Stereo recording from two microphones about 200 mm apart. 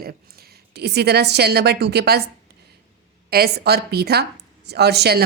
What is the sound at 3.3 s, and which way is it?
A woman's voice, 50° right (ahead or behind).